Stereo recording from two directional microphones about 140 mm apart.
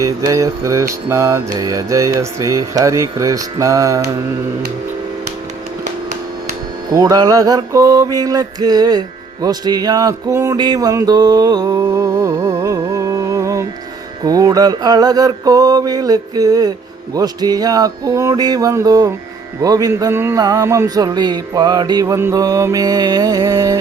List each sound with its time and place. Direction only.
0.0 s speech: 25° right (ahead or behind)
6.9 s mantra: 25° right (ahead or behind)
14.3 s speech: 25° right (ahead or behind)